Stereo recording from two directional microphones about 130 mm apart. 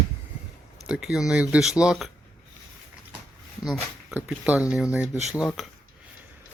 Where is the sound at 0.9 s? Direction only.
5° right (ahead or behind).